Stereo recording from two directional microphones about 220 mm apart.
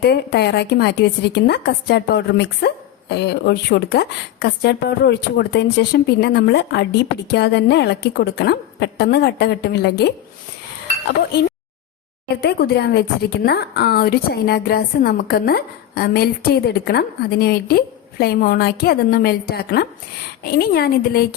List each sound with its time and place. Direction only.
0.0 s a woman's voice: 50° left (ahead or behind)
12.4 s a woman's voice: 45° left (ahead or behind)